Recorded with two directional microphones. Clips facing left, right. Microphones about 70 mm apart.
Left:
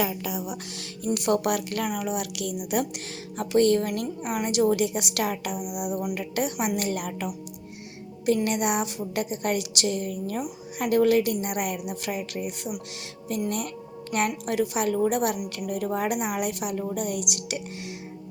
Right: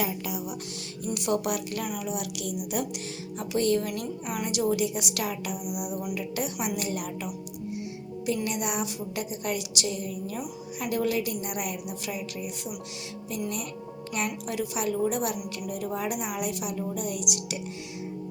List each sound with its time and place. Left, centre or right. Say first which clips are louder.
1.0 s a woman's voice: left 4 dB; left
6.1 s a woman's voice: left 3 dB; left
8.4 s a woman's voice: left 4 dB; left
14.1 s a woman's voice: left 5 dB; left